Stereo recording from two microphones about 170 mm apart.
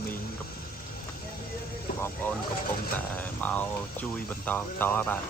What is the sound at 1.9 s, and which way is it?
Speech, 10° left (ahead or behind).